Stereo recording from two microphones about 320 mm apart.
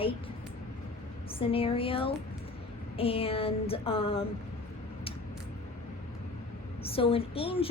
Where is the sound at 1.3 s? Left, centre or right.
Centre.